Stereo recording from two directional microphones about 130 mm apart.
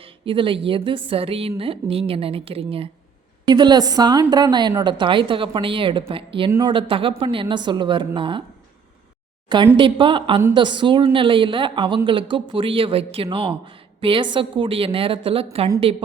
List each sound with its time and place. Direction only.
0.0 s a woman's voice: 40° right (ahead or behind)
3.4 s speech: 35° right (ahead or behind)
9.7 s a woman's voice: 40° right (ahead or behind)